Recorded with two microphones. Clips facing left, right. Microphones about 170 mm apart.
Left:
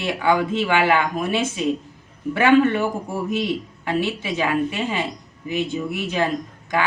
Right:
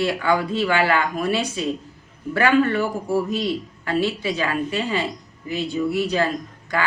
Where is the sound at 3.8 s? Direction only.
20° left (ahead or behind).